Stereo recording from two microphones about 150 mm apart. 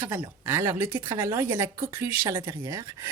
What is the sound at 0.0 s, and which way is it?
Speech, 15° right (ahead or behind).